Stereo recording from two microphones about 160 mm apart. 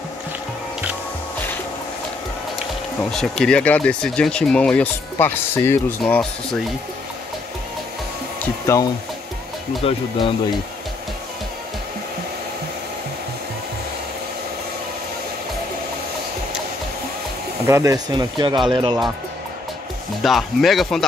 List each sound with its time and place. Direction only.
3.0 s speech: centre (ahead or behind)
8.7 s speech: 20° left (ahead or behind)
9.8 s speech: 35° left (ahead or behind)
17.6 s speech: 20° right (ahead or behind)
20.2 s speech: centre (ahead or behind)